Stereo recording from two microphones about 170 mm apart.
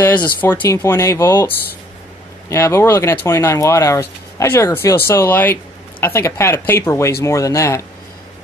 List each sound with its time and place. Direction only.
0.4 s speech: 10° left (ahead or behind)
2.5 s speech: 15° left (ahead or behind)